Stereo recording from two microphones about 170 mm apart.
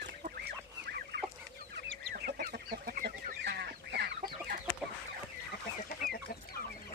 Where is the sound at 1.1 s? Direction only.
90° right.